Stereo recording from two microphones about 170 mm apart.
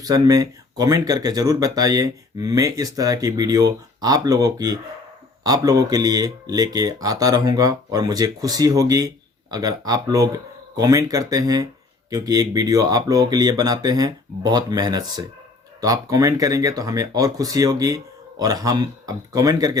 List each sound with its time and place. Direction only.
0.0 s speech: 20° right (ahead or behind)